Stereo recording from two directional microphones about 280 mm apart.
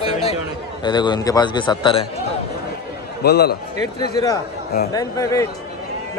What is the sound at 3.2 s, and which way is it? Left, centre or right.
Speech, left.